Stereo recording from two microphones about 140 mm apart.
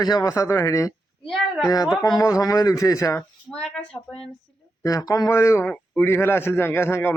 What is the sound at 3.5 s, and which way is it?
Speech, 5° left (ahead or behind).